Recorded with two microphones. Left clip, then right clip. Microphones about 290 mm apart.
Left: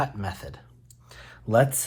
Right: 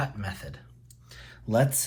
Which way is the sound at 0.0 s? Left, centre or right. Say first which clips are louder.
Left 5 dB; centre.